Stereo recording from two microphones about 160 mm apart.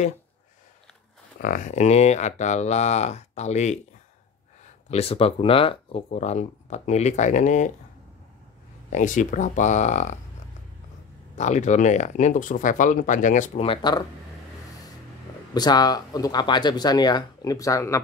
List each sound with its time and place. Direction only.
1.4 s speech: 55° left (ahead or behind)
4.9 s speech: 35° left (ahead or behind)
8.9 s speech: 50° left (ahead or behind)
11.3 s speech: 45° left (ahead or behind)
13.7 s speech: 25° left (ahead or behind)
15.5 s speech: 25° left (ahead or behind)